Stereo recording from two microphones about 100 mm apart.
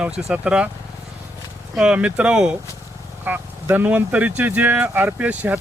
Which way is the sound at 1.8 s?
10° right (ahead or behind).